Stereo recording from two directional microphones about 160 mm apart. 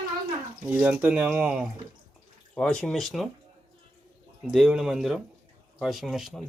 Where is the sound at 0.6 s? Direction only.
5° right (ahead or behind).